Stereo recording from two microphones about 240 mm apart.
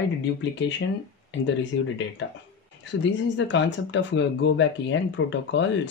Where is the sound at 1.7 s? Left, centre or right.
Left.